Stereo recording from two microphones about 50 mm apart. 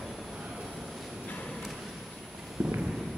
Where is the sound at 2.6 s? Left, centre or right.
Right.